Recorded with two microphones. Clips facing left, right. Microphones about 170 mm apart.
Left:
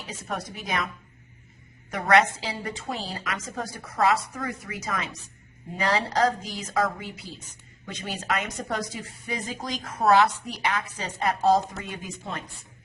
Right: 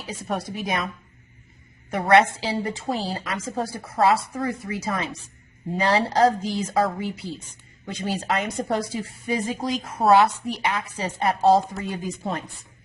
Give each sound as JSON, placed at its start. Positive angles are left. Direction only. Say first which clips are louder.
{"t": 0.1, "sound": "a woman's voice", "louder": "right 5 dB", "side_deg": -30}
{"t": 1.9, "sound": "a woman's voice", "louder": "right 3 dB", "side_deg": -30}